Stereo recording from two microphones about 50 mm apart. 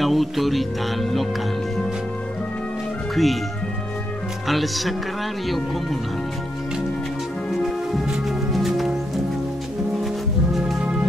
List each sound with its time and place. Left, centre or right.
0.0 s music: centre
3.2 s speech: centre
4.5 s speech: centre
7.5 s music: centre